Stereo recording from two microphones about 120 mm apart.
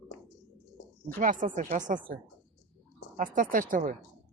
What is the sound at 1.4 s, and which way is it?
Speech, 90° right.